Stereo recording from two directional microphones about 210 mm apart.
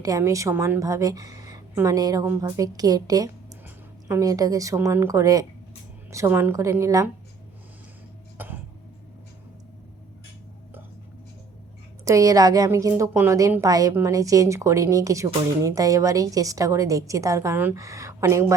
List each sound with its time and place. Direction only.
0.0 s a woman's voice: 15° right (ahead or behind)
8.4 s a sound: 10° right (ahead or behind)
12.0 s a woman's voice: 15° right (ahead or behind)